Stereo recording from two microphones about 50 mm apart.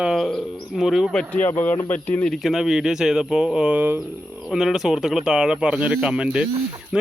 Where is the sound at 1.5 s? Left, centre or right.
Left.